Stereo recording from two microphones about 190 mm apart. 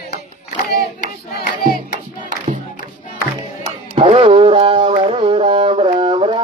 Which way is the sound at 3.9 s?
30° right (ahead or behind).